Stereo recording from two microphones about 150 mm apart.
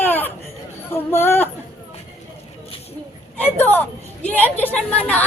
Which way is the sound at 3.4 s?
10° left (ahead or behind).